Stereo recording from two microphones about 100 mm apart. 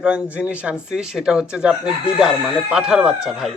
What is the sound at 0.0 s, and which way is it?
Speech, 15° right (ahead or behind).